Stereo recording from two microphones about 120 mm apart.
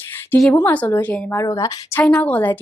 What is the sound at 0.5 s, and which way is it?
Speech, 15° left (ahead or behind).